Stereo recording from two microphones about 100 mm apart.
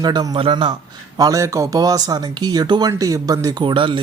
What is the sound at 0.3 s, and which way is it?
Speech, 60° right (ahead or behind).